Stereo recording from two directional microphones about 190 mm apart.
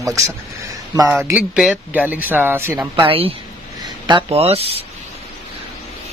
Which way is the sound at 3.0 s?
30° right (ahead or behind).